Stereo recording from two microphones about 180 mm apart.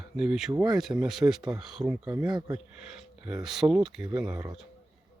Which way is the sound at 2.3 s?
25° right (ahead or behind).